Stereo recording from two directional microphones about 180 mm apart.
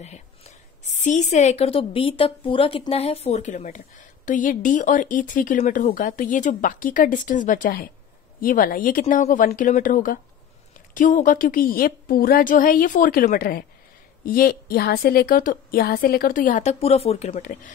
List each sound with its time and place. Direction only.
0.0 s a woman's voice: 40° left (ahead or behind)